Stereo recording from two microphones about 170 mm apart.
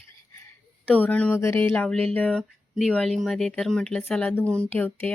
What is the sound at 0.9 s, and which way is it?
Speech, 10° left (ahead or behind).